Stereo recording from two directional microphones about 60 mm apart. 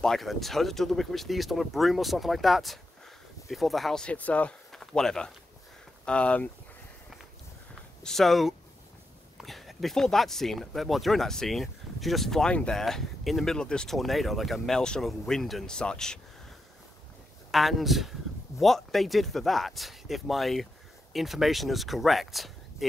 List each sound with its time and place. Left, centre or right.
0.0 s speech: centre
4.0 s speech: left
4.7 s speech: centre
8.0 s speech: centre
13.6 s speech: centre
13.9 s speech: centre
14.8 s speech: centre
17.5 s speech: centre